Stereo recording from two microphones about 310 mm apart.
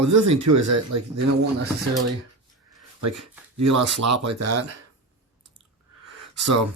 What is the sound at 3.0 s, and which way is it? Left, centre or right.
Speech, right.